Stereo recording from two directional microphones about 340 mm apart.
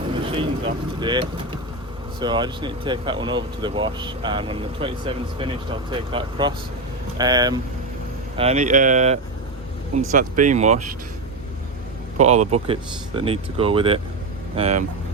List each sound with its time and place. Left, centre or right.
0.2 s speech: centre
12.1 s speech: centre